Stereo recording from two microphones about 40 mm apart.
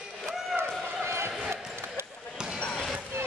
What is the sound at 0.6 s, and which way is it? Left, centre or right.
Run, right.